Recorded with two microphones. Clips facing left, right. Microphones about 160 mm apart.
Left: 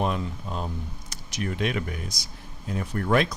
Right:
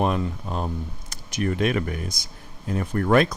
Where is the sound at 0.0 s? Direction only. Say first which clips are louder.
Right 4 dB; 55° right (ahead or behind).